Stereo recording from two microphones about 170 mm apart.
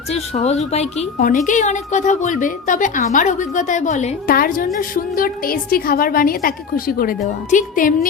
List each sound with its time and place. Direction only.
0.1 s a woman's voice: 40° left (ahead or behind)